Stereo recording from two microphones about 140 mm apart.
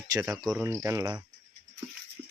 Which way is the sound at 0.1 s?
25° right (ahead or behind).